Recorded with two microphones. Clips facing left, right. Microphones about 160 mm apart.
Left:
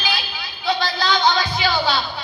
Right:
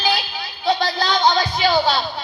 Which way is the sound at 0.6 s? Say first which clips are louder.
Right 2 dB; 45° right (ahead or behind).